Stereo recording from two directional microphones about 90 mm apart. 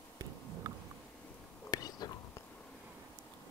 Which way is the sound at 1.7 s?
45° left (ahead or behind).